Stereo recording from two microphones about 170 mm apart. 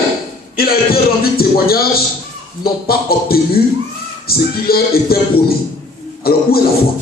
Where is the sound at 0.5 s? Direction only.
60° left (ahead or behind).